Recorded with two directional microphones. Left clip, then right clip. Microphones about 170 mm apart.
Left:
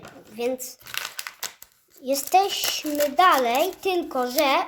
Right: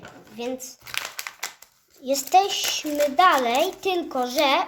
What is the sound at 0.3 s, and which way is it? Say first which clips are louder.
Speech: left 4 dB; 30° left (ahead or behind).